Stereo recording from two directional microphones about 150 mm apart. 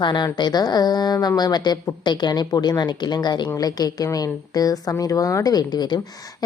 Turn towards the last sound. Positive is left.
turn(degrees=25)  # may be behind; listen again after turning